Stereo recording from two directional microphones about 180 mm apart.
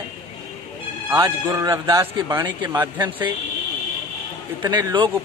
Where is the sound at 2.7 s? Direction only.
10° right (ahead or behind).